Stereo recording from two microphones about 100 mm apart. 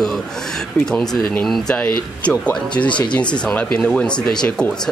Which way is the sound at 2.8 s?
25° left (ahead or behind).